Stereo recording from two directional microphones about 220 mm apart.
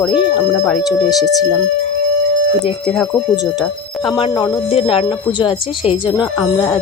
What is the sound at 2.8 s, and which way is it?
Speech, centre (ahead or behind).